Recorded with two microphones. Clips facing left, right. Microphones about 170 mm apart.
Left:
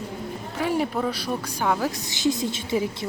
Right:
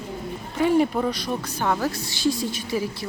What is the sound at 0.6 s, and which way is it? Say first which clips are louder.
Speech: right 5 dB; centre (ahead or behind).